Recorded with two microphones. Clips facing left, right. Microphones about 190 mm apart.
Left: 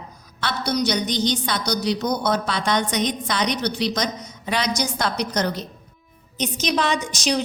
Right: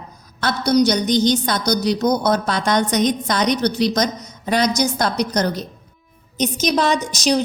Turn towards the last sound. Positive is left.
turn(degrees=-40)  # may be behind; listen again after turning